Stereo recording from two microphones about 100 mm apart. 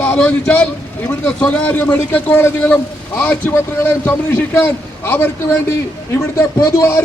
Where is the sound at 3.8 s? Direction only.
25° left (ahead or behind).